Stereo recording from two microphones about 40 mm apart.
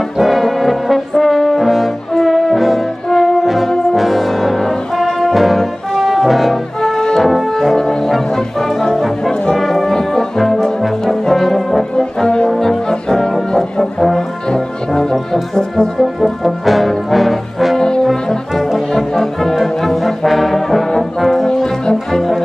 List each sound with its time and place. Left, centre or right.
0.2 s brass instrument: centre
6.8 s music: centre
7.2 s brass instrument: centre
7.5 s music: centre
9.9 s brass instrument: centre
12.0 s brass instrument: centre
17.7 s brass instrument: centre
18.9 s music: centre
19.5 s brass instrument: centre
22.1 s brass instrument: centre